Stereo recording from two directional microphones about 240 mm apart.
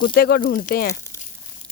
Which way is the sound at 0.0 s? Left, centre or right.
Left.